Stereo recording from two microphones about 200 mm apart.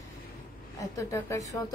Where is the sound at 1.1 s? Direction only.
15° left (ahead or behind).